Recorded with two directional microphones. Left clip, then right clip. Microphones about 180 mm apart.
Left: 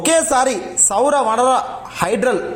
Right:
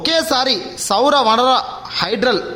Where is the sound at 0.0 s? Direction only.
25° right (ahead or behind).